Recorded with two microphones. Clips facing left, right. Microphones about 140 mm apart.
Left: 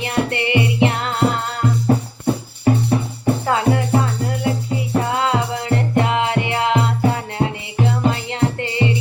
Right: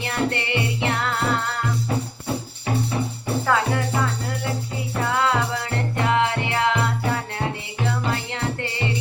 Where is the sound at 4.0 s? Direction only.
25° left (ahead or behind).